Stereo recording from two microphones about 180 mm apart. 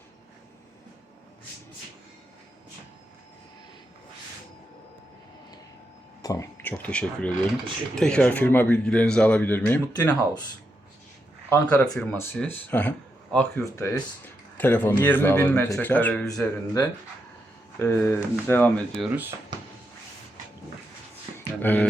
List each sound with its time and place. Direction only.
6.2 s speech: 15° left (ahead or behind)
9.9 s speech: 20° left (ahead or behind)
11.4 s speech: 15° left (ahead or behind)
19.0 s speech: 10° right (ahead or behind)
21.3 s a sound: 10° left (ahead or behind)